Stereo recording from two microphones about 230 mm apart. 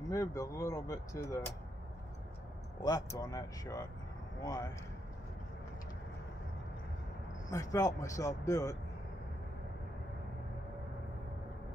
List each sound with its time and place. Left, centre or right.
0.1 s speech: centre
2.8 s speech: centre
7.4 s speech: centre